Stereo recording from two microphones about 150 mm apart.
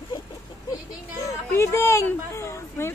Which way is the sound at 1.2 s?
20° left (ahead or behind).